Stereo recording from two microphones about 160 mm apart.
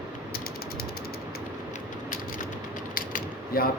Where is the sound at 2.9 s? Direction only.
65° left (ahead or behind).